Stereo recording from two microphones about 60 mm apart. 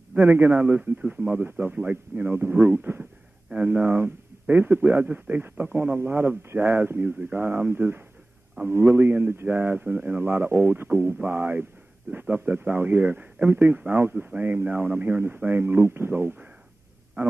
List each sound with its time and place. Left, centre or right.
0.2 s a man's voice: right
5.0 s a man's voice: right